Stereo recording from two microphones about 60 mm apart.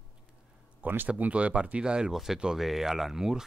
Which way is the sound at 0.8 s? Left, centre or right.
Right.